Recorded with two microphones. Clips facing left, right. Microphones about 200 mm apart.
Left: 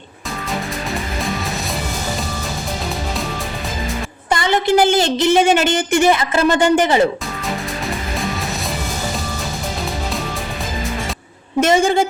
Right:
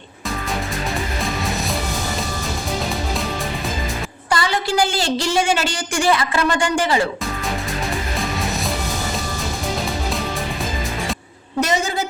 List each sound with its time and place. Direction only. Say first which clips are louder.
4.3 s a woman's voice: left 5 dB; 20° left (ahead or behind)
11.6 s a woman's voice: left 7 dB; 25° left (ahead or behind)